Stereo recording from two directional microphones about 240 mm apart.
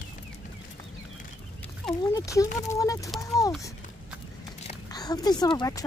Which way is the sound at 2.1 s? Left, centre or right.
Centre.